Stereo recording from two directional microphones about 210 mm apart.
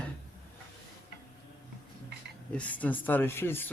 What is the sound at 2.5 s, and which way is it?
Speech, 5° left (ahead or behind).